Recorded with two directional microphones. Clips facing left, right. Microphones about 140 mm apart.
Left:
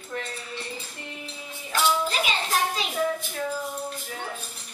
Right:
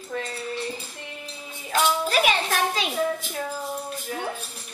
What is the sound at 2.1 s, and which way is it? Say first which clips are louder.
Music: right 4 dB; 80° right.